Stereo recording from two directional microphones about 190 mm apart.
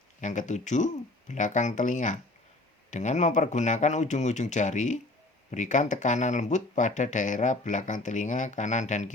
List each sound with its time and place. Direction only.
0.2 s speech: 40° left (ahead or behind)